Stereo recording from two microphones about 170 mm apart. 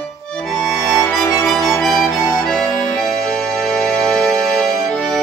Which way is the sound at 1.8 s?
Centre (ahead or behind).